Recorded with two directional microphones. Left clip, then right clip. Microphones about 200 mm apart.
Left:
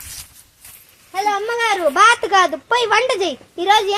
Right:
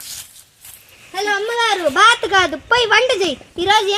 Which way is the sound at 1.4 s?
35° right (ahead or behind).